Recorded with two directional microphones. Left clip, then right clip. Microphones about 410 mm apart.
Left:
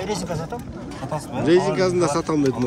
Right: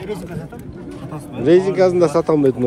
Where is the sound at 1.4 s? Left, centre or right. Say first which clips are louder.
Right 5 dB; centre.